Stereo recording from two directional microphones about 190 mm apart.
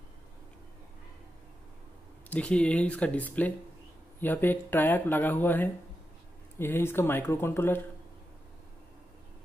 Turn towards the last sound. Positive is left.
turn(degrees=10)  # may be behind; listen again after turning